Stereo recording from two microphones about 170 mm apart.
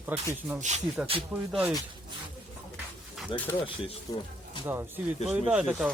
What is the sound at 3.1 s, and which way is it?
Speech, 5° left (ahead or behind).